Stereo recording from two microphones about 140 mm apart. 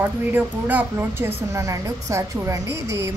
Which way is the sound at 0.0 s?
10° right (ahead or behind).